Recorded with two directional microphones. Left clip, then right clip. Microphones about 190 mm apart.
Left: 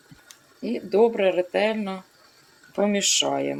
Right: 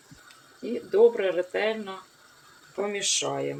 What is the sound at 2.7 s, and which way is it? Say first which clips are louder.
Speech: left 6 dB; 45° left (ahead or behind).